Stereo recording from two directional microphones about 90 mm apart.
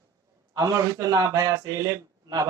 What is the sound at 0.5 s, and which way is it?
Speech, 40° right (ahead or behind).